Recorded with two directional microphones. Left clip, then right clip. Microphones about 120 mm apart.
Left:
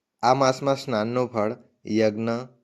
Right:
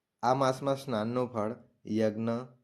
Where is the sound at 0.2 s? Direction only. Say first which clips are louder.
Left 8 dB; 20° left (ahead or behind).